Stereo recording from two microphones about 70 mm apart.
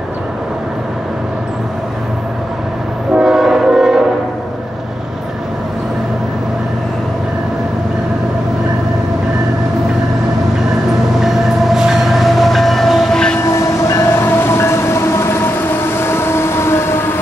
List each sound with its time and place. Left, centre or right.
3.2 s train: centre
11.1 s train: centre
13.6 s train: left
14.2 s train: left